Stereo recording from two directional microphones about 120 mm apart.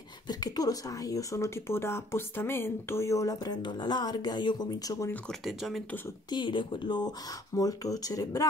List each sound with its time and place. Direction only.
0.3 s speech: 30° left (ahead or behind)
5.1 s speech: centre (ahead or behind)
6.3 s speech: 40° left (ahead or behind)